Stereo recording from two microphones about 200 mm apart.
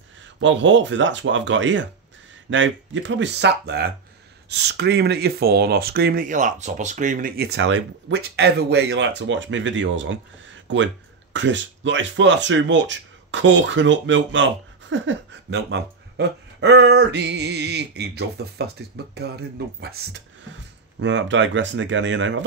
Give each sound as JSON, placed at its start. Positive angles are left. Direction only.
{"t": 0.4, "sound": "speech", "side_deg": -70}
{"t": 21.0, "sound": "speech", "side_deg": -65}